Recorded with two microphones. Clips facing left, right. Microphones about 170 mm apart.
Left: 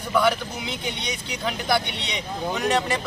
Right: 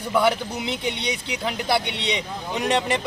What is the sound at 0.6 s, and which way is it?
Speech, 25° right (ahead or behind).